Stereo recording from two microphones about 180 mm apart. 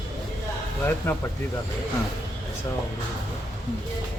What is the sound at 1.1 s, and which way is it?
Speech, 15° left (ahead or behind).